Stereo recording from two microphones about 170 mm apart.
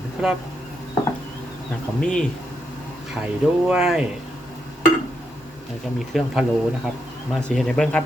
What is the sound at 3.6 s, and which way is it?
Speech, 5° right (ahead or behind).